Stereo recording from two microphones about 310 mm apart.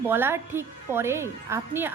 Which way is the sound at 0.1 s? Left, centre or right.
Centre.